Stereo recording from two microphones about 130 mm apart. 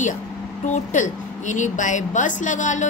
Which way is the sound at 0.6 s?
70° left (ahead or behind).